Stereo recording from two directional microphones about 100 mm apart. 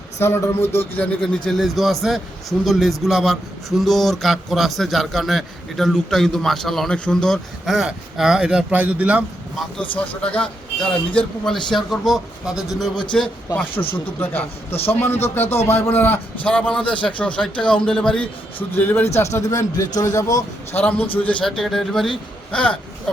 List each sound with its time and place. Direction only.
0.2 s a man's voice: 25° left (ahead or behind)
1.2 s a man's voice: 5° left (ahead or behind); by 9.2 s 15° right (ahead or behind)
9.9 s a man's voice: 10° left (ahead or behind)
13.5 s a man's voice: 20° left (ahead or behind)
18.8 s a man's voice: 20° left (ahead or behind)
20.8 s speech: 15° left (ahead or behind)
21.4 s a man's voice: 5° left (ahead or behind)